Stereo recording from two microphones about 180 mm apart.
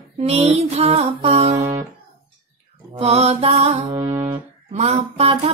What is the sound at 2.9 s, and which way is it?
Music, 35° right (ahead or behind).